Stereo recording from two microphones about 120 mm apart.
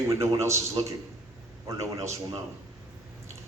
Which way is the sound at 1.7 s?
25° right (ahead or behind).